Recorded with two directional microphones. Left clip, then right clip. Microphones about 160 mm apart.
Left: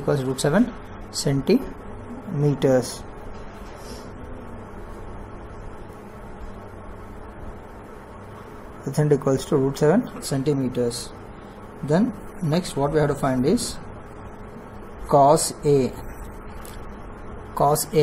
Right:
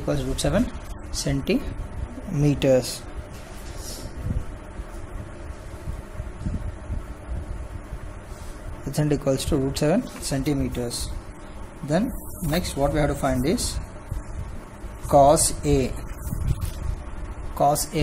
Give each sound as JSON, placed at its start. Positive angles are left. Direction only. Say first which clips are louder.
{"t": 0.0, "sound": "speech", "louder": "left 3 dB", "side_deg": -15}
{"t": 2.4, "sound": "speech", "louder": "even", "side_deg": -30}
{"t": 8.9, "sound": "speech", "louder": "left 3 dB", "side_deg": -25}
{"t": 10.2, "sound": "speech", "louder": "left 2 dB", "side_deg": -15}
{"t": 12.4, "sound": "speech", "louder": "even", "side_deg": -5}
{"t": 15.0, "sound": "speech", "louder": "even", "side_deg": -15}
{"t": 17.6, "sound": "speech", "louder": "left 2 dB", "side_deg": -10}